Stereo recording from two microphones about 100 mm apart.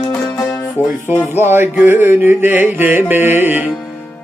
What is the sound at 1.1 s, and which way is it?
Music, 20° right (ahead or behind).